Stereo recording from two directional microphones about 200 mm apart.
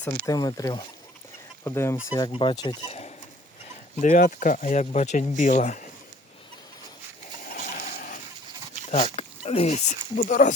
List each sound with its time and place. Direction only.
0.3 s speech: 20° left (ahead or behind); by 5.9 s 35° left (ahead or behind)
7.5 s a sound: 45° left (ahead or behind)
8.9 s speech: 30° left (ahead or behind)